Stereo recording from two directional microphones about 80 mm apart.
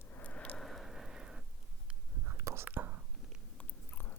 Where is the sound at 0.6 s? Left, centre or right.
Centre.